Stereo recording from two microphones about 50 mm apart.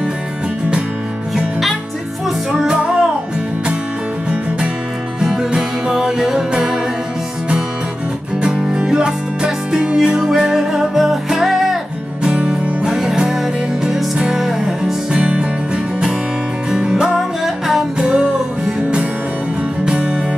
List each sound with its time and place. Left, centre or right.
2.6 s music: centre
5.2 s music: centre
8.4 s music: centre
12.3 s music: right
12.8 s music: centre
15.1 s music: centre